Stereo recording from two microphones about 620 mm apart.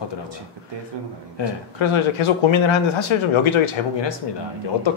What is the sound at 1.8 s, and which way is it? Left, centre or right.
Speech, left.